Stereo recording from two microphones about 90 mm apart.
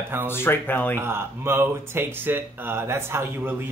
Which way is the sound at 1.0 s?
25° right (ahead or behind).